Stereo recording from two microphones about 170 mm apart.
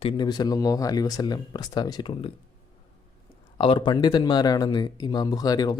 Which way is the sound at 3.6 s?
30° left (ahead or behind).